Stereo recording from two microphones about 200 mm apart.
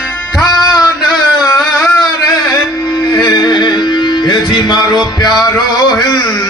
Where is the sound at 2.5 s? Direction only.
20° left (ahead or behind).